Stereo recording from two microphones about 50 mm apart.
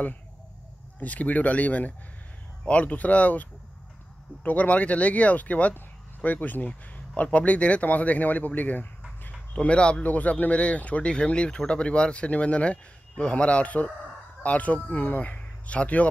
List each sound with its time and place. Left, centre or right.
0.9 s speech: left
5.8 s a sound: left
7.2 s speech: left
9.6 s speech: left
10.0 s speech: left